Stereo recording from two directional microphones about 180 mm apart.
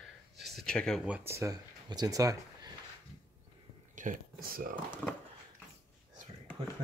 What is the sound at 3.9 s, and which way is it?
Speech, 45° right (ahead or behind).